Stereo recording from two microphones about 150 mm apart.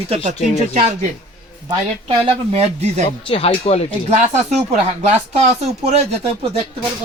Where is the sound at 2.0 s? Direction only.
45° right (ahead or behind).